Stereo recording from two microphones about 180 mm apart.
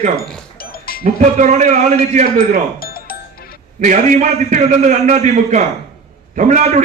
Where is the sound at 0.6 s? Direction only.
55° left (ahead or behind).